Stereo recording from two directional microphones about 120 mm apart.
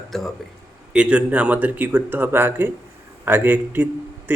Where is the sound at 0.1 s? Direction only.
Centre (ahead or behind).